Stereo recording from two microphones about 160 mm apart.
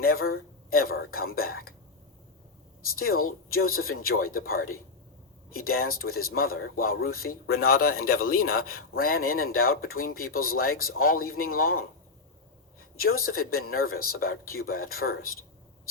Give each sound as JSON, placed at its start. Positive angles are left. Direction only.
{"t": 0.0, "sound": "speech", "side_deg": 65}
{"t": 2.9, "sound": "speech", "side_deg": 65}
{"t": 13.0, "sound": "speech", "side_deg": 65}